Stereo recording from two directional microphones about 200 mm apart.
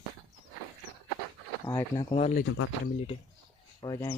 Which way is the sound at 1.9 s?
35° left (ahead or behind).